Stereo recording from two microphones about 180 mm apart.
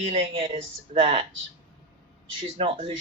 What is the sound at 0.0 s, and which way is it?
Speech, 35° right (ahead or behind).